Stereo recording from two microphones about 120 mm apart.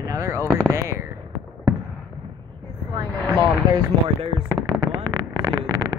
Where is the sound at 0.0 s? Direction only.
25° right (ahead or behind).